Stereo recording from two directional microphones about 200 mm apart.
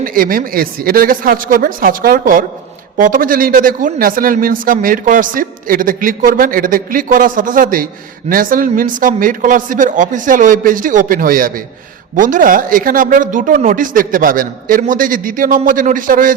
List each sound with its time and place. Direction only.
0.0 s a man's voice: 45° right (ahead or behind)